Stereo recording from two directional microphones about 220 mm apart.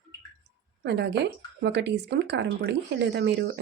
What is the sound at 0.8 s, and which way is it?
Speech, 50° right (ahead or behind).